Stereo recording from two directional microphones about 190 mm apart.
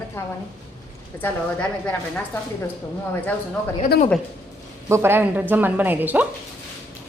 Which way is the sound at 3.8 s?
45° left (ahead or behind).